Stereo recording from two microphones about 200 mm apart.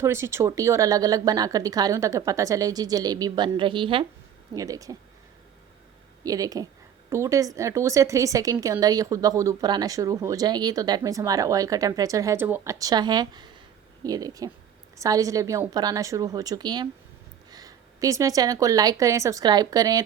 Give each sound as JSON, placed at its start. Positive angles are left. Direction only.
{"t": 0.0, "sound": "speech", "side_deg": -15}
{"t": 6.2, "sound": "a woman's voice", "side_deg": -15}